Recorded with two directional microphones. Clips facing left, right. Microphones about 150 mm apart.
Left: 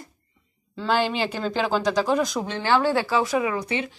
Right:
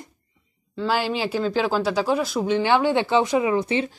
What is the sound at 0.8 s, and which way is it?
Speech, 5° right (ahead or behind).